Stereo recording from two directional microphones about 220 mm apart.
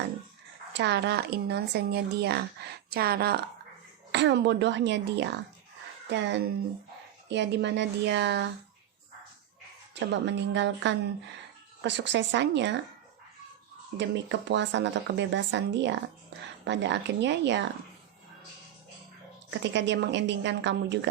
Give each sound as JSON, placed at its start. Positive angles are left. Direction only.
{"t": 0.7, "sound": "speech", "side_deg": -50}
{"t": 9.9, "sound": "speech", "side_deg": -50}
{"t": 14.3, "sound": "speech", "side_deg": -55}
{"t": 19.5, "sound": "speech", "side_deg": -55}